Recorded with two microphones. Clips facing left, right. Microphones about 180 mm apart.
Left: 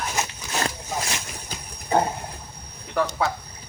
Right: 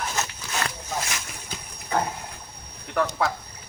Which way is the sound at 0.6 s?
30° left (ahead or behind).